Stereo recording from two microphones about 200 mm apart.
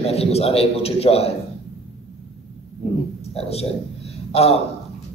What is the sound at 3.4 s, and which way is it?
A man's voice, 30° left (ahead or behind).